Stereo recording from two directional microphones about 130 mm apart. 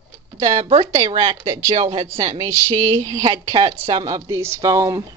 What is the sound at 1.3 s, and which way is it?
Speech, 30° right (ahead or behind).